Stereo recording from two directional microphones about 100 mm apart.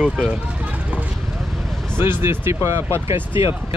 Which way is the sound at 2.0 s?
25° right (ahead or behind).